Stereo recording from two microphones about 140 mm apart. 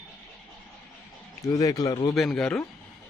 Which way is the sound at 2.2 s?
5° left (ahead or behind).